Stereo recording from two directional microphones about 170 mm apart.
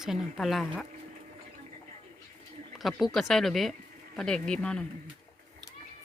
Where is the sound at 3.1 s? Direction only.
Centre (ahead or behind).